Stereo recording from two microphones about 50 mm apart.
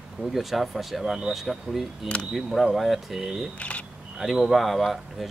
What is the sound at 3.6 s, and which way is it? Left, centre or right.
Speech, left.